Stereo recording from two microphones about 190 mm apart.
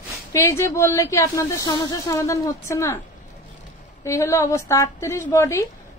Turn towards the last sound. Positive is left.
turn(degrees=15)  # may be behind; listen again after turning